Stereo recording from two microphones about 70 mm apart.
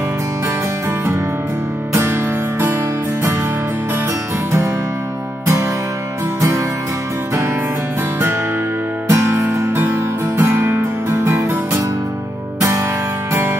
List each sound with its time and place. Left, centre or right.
9.1 s music: right